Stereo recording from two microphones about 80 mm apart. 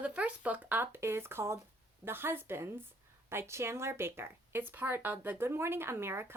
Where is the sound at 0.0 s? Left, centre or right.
Centre.